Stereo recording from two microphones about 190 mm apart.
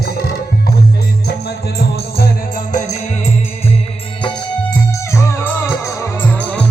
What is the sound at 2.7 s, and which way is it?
Music, 40° left (ahead or behind).